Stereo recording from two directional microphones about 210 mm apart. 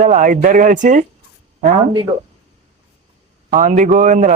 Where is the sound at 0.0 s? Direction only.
40° right (ahead or behind).